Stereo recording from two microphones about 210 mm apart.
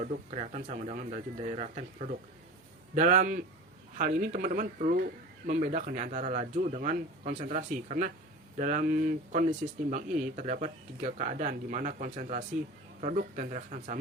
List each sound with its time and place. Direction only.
0.0 s speech: 35° right (ahead or behind)
2.9 s speech: 40° right (ahead or behind)